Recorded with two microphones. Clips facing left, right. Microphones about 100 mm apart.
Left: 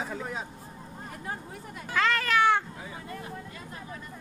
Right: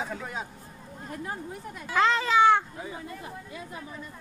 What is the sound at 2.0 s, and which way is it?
Speech, 15° right (ahead or behind).